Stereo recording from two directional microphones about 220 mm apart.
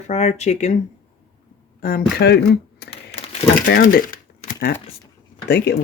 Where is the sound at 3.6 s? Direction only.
40° left (ahead or behind).